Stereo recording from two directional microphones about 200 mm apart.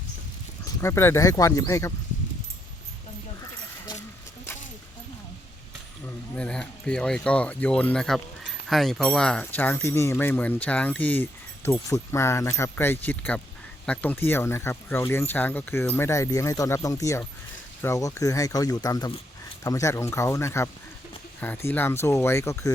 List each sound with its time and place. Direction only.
0.6 s speech: 15° left (ahead or behind)
6.1 s speech: 5° left (ahead or behind)